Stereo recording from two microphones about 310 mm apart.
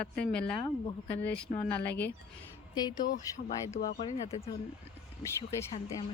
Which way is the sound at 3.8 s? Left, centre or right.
Left.